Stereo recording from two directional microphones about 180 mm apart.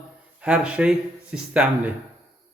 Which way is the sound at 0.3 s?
5° right (ahead or behind).